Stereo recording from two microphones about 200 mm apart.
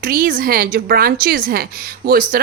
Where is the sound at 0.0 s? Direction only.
45° right (ahead or behind).